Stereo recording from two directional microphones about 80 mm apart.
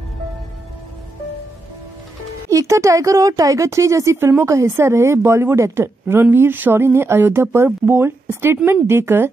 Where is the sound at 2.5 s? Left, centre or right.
Right.